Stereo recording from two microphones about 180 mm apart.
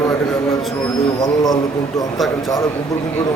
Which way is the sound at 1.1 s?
20° left (ahead or behind).